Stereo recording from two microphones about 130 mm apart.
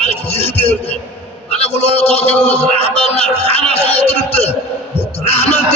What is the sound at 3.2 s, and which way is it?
Speech, 55° left (ahead or behind).